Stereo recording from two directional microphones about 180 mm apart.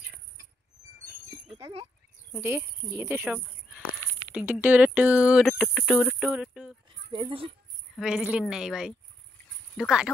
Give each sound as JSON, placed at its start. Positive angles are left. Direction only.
{"t": 1.6, "sound": "speech", "side_deg": -35}
{"t": 2.3, "sound": "speech", "side_deg": -10}
{"t": 7.1, "sound": "speech", "side_deg": -25}
{"t": 7.9, "sound": "speech", "side_deg": -5}